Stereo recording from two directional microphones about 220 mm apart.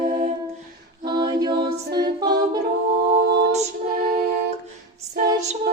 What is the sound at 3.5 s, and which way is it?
Music, 35° right (ahead or behind).